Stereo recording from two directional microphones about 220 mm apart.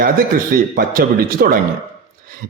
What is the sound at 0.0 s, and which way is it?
Speech, 40° right (ahead or behind).